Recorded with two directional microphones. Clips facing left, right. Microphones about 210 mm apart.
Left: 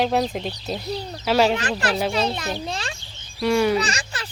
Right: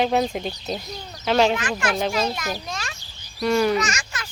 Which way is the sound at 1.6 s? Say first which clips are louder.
Left 1 dB; 35° left (ahead or behind).